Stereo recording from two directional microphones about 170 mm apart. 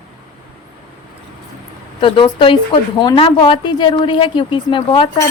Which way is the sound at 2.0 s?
30° left (ahead or behind).